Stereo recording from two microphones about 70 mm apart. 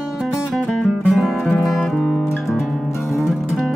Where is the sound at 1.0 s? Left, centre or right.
Centre.